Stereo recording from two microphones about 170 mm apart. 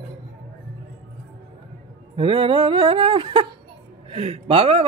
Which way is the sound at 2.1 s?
30° right (ahead or behind).